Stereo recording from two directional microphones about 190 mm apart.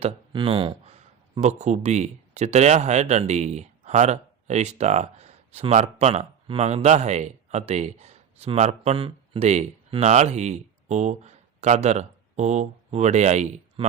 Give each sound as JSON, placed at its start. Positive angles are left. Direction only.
{"t": 0.0, "sound": "speech", "side_deg": -30}